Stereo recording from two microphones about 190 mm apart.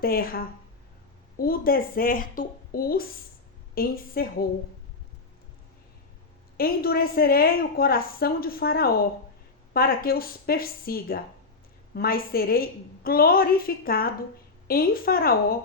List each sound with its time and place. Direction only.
0.0 s a woman's voice: 50° left (ahead or behind)
6.6 s a woman's voice: 50° left (ahead or behind)